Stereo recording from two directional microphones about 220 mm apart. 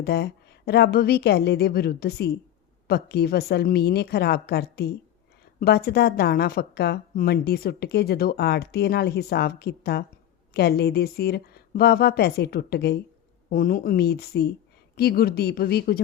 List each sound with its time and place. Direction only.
0.0 s a woman's voice: 50° left (ahead or behind)